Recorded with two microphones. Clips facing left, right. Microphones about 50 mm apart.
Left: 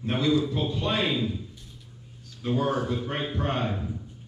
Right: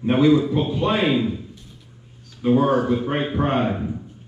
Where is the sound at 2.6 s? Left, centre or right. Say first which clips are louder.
Right 8 dB; centre.